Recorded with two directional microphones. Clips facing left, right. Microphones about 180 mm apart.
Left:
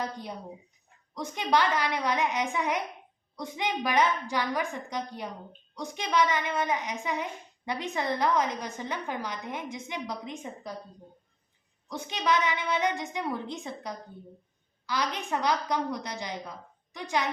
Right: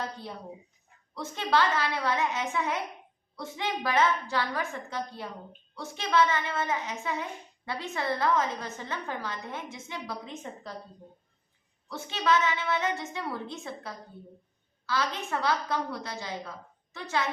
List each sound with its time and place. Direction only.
0.0 s a child's voice: 15° left (ahead or behind)
11.9 s a child's voice: 15° left (ahead or behind)